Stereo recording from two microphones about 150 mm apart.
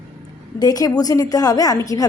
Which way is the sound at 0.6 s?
25° left (ahead or behind).